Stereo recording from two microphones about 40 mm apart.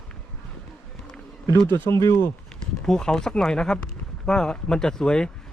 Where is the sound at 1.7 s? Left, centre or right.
Left.